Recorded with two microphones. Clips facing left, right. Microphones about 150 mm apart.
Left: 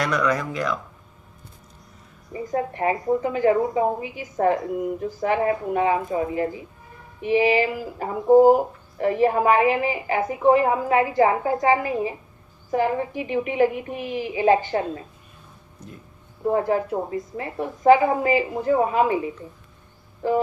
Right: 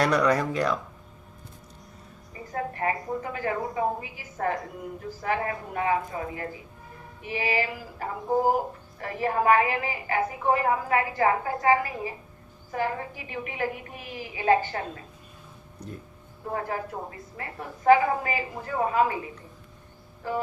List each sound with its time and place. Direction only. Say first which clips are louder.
0.0 s speech: right 1 dB; 35° right (ahead or behind)
2.3 s speech: left 7 dB; 20° left (ahead or behind)
16.5 s speech: left 10 dB; 25° left (ahead or behind)